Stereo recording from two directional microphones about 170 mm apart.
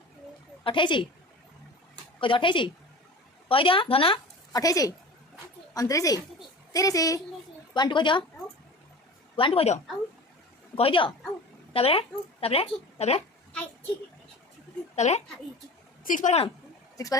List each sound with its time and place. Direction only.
0.6 s a woman's voice: 30° left (ahead or behind)
2.2 s a woman's voice: 30° left (ahead or behind)
4.6 s a woman's voice: 20° left (ahead or behind)
9.3 s a woman's voice: 30° left (ahead or behind)
14.9 s a woman's voice: 40° left (ahead or behind)
17.0 s a woman's voice: 20° left (ahead or behind)